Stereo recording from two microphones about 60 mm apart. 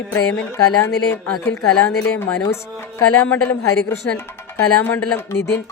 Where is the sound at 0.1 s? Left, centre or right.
Left.